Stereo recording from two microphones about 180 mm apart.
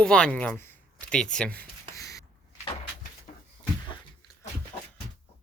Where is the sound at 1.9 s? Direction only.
20° left (ahead or behind).